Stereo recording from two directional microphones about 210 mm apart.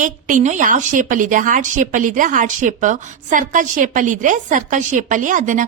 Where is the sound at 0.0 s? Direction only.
40° right (ahead or behind).